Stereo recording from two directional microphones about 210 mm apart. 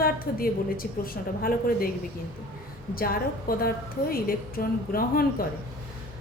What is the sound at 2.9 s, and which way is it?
A woman's voice, 45° left (ahead or behind).